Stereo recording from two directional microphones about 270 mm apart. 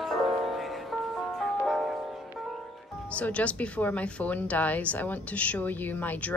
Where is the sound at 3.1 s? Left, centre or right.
Centre.